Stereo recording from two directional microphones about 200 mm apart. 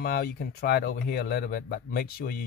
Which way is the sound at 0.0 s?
50° left (ahead or behind).